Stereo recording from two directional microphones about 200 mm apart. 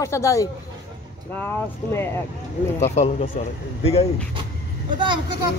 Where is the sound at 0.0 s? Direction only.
15° left (ahead or behind).